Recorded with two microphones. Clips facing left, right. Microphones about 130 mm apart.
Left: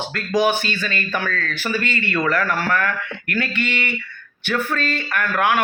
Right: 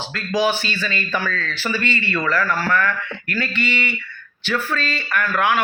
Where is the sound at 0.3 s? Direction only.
55° left (ahead or behind).